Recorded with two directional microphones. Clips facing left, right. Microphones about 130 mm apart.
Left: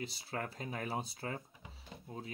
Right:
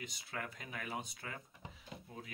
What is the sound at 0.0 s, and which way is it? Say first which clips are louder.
Speech: left 4 dB; 30° left (ahead or behind).